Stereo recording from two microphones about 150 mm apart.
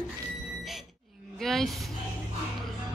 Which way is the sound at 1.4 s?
Centre (ahead or behind).